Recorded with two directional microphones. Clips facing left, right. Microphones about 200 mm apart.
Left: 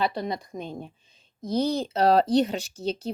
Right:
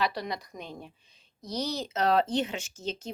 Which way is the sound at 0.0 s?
25° left (ahead or behind).